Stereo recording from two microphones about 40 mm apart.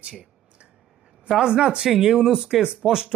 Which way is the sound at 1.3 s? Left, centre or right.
Centre.